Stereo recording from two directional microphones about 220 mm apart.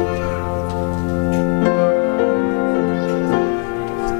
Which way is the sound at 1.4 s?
20° left (ahead or behind).